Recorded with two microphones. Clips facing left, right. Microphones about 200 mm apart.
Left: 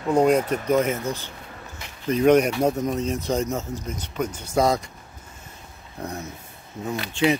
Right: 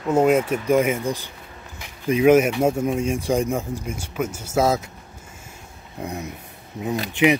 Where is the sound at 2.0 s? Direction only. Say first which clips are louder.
Right 2 dB; 10° right (ahead or behind).